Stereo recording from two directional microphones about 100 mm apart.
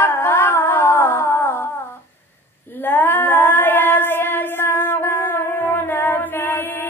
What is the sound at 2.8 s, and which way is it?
Child singing, 20° left (ahead or behind).